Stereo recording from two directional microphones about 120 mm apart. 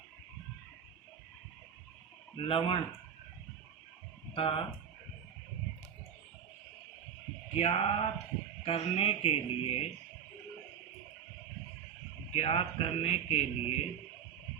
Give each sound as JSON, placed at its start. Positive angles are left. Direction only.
{"t": 2.3, "sound": "speech", "side_deg": 50}
{"t": 4.4, "sound": "speech", "side_deg": 45}
{"t": 7.5, "sound": "a man's voice", "side_deg": 60}
{"t": 12.3, "sound": "a man's voice", "side_deg": 55}